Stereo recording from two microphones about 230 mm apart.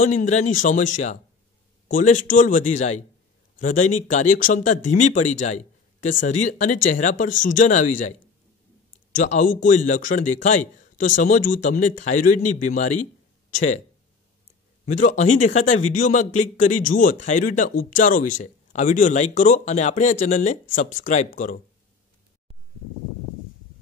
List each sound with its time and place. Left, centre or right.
0.0 s a man's voice: left
1.9 s a man's voice: left
9.1 s a man's voice: left
14.9 s a man's voice: left